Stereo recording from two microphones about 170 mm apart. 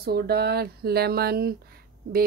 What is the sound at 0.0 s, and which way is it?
A woman's voice, 65° right (ahead or behind).